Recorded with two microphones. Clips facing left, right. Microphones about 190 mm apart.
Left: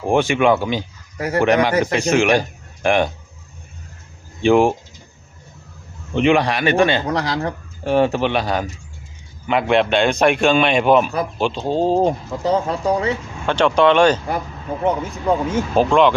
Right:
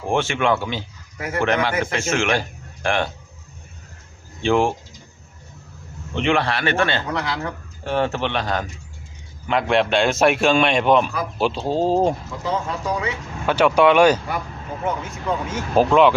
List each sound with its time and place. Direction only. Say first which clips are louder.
0.1 s a man's voice: left 5 dB; 15° left (ahead or behind)
1.2 s speech: left 5 dB; 40° left (ahead or behind)
1.5 s a man's voice: left 5 dB; 15° left (ahead or behind)
4.4 s a man's voice: left 5 dB; 15° left (ahead or behind)
6.1 s a man's voice: left 5 dB; 15° left (ahead or behind)
7.1 s speech: left 4 dB; 35° left (ahead or behind)
7.9 s a man's voice: left 5 dB; 15° left (ahead or behind)
12.4 s speech: left 6 dB; 35° left (ahead or behind)
13.4 s speech: even; 10° right (ahead or behind)
14.8 s speech: left 6 dB; 30° left (ahead or behind)
15.7 s a man's voice: even; 5° right (ahead or behind)